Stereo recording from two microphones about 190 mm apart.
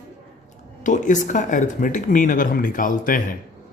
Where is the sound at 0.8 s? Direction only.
40° left (ahead or behind).